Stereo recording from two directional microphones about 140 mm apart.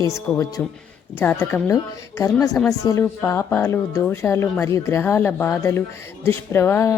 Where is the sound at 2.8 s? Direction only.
25° left (ahead or behind).